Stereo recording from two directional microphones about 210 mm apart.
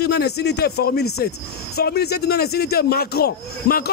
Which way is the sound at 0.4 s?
50° left (ahead or behind).